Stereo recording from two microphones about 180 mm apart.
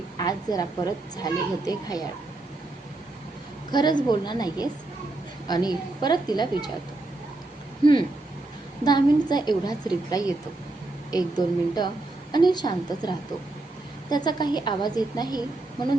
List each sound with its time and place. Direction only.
0.2 s a woman's voice: 20° left (ahead or behind)
3.7 s a woman's voice: 25° left (ahead or behind)
8.8 s a woman's voice: 25° left (ahead or behind)